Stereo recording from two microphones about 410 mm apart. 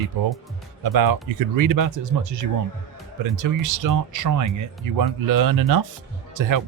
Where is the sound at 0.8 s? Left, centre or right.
Right.